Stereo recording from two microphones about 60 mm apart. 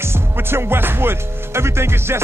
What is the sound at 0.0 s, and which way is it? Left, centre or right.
Music, right.